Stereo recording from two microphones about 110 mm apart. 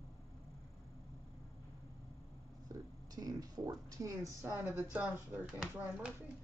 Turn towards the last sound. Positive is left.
turn(degrees=-10)  # may be behind; listen again after turning